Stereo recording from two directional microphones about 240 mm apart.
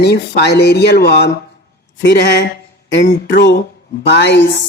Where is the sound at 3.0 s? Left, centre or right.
Left.